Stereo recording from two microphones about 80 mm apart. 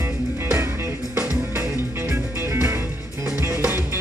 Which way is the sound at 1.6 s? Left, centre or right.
Right.